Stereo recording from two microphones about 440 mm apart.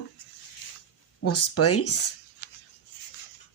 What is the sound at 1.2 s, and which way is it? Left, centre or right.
Speech, left.